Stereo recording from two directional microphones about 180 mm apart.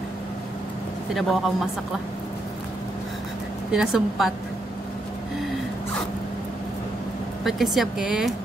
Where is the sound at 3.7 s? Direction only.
Centre (ahead or behind).